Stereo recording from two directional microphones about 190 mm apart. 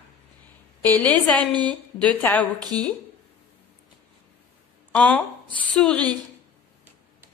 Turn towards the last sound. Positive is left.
turn(degrees=5)  # may be behind; listen again after turning